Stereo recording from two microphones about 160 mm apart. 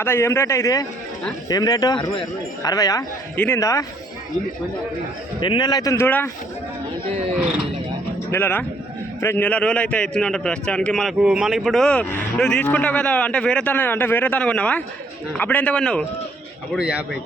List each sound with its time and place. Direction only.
0.0 s a man's voice: 15° left (ahead or behind)
5.4 s speech: 30° left (ahead or behind); by 6.3 s 15° left (ahead or behind)
8.3 s a man's voice: 15° left (ahead or behind)
16.7 s speech: 5° right (ahead or behind)